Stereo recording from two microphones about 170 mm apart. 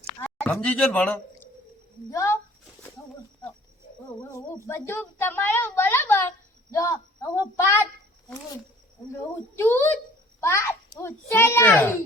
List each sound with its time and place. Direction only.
0.3 s a woman's voice: 10° left (ahead or behind)
3.0 s a sound: 15° left (ahead or behind)
4.2 s a woman's voice: 15° left (ahead or behind)
9.6 s a woman's voice: 15° left (ahead or behind)